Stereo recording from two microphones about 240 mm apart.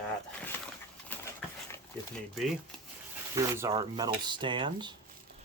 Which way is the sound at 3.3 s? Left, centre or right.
Centre.